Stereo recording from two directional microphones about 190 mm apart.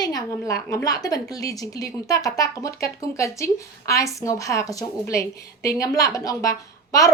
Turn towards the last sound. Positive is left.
turn(degrees=15)  # may be behind; listen again after turning